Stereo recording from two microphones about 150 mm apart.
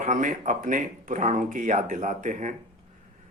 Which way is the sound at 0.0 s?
60° right (ahead or behind).